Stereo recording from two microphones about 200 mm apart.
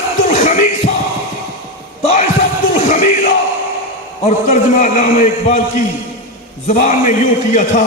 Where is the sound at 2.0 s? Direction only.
35° left (ahead or behind).